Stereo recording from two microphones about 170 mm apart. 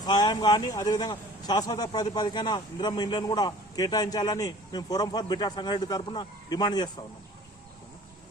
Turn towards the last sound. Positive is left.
turn(degrees=25)  # may be behind; listen again after turning